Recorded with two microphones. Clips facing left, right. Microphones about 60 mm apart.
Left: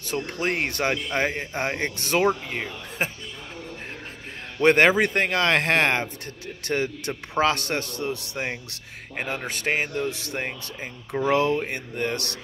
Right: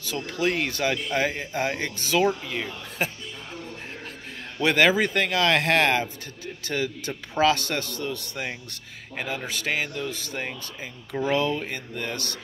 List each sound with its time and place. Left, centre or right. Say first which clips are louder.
0.1 s speech: even; left
2.0 s speech: right 1 dB; left
2.2 s speech: left 1 dB; left
4.6 s speech: left 3 dB; left
9.7 s speech: left 3 dB; left
10.0 s speech: left 2 dB; left
11.3 s speech: left 3 dB; left
11.7 s speech: left 4 dB; left